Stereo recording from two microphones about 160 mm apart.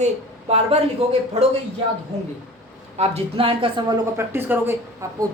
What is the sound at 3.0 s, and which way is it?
Speech, 35° right (ahead or behind).